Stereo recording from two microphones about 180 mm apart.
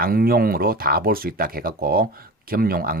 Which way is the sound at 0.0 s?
55° right (ahead or behind).